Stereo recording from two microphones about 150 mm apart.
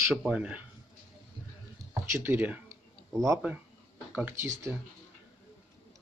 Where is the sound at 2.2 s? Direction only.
15° right (ahead or behind).